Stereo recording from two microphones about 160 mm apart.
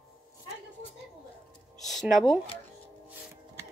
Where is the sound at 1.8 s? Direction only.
Centre (ahead or behind).